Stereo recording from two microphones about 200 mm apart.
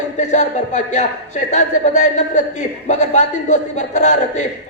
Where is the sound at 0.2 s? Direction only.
35° left (ahead or behind).